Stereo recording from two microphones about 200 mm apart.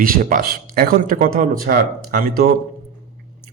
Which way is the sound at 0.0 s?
45° right (ahead or behind).